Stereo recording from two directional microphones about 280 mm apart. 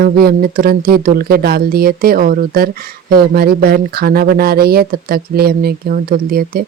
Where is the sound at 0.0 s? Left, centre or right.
Right.